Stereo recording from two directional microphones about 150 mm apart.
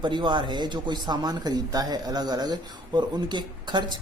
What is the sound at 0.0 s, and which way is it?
Speech, 30° right (ahead or behind).